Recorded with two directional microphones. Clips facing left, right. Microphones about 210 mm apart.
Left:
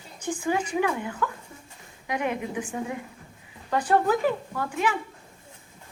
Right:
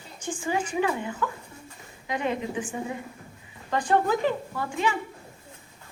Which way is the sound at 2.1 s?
10° left (ahead or behind).